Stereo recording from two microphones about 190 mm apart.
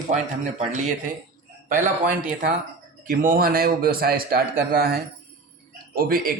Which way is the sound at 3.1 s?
45° right (ahead or behind).